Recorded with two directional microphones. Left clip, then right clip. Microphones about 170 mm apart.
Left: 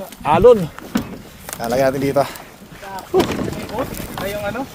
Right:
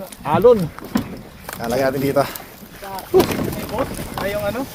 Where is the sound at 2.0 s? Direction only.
15° left (ahead or behind).